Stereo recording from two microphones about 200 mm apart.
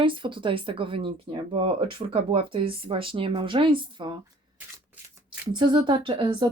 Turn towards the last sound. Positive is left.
turn(degrees=-25)  # may be behind; listen again after turning